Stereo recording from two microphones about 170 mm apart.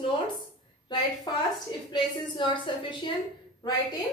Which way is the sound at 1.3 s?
25° left (ahead or behind).